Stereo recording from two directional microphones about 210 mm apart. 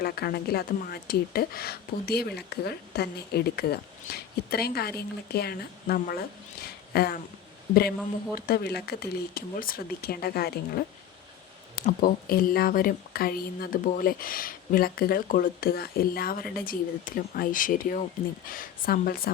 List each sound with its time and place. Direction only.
0.0 s speech: 50° left (ahead or behind)
8.4 s speech: 45° left (ahead or behind)
12.0 s speech: 45° left (ahead or behind)